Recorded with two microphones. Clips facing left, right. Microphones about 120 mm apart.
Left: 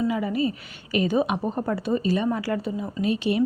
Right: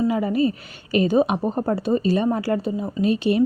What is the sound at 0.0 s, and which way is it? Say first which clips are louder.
A woman's voice: right 4 dB; 40° right (ahead or behind).